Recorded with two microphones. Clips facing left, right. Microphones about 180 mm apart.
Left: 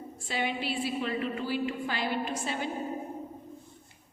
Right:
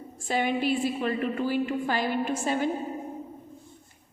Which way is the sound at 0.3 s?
50° right (ahead or behind).